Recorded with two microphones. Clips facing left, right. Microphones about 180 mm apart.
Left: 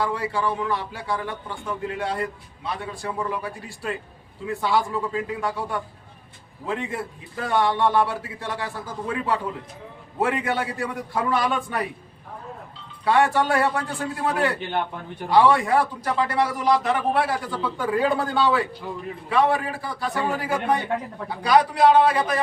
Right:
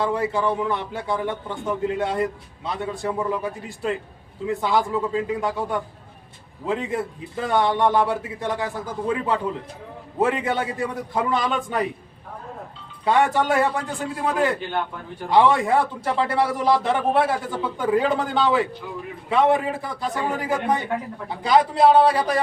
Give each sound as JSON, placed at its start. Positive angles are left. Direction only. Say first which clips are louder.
{"t": 0.0, "sound": "a man's voice", "louder": "right 3 dB", "side_deg": -20}
{"t": 13.1, "sound": "a man's voice", "louder": "even", "side_deg": -20}